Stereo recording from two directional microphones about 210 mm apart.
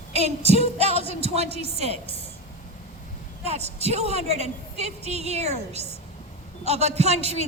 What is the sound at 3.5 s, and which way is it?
A woman's voice, 30° right (ahead or behind).